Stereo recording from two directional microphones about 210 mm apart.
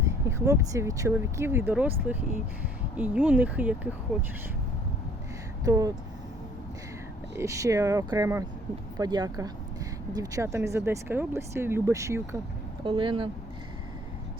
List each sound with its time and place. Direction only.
0.0 s speech: 15° right (ahead or behind)
5.6 s speech: 15° right (ahead or behind)
7.3 s speech: 15° right (ahead or behind)
12.8 s speech: 25° right (ahead or behind)